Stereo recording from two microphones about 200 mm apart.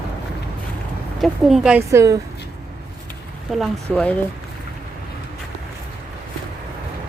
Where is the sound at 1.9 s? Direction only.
15° right (ahead or behind).